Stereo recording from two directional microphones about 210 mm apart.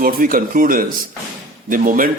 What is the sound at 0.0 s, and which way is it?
Speech, 45° right (ahead or behind).